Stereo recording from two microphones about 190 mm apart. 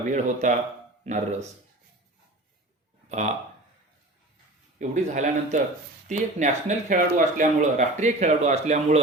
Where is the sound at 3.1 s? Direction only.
35° right (ahead or behind).